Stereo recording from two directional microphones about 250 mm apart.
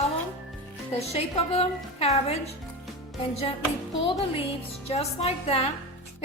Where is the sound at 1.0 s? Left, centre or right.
Left.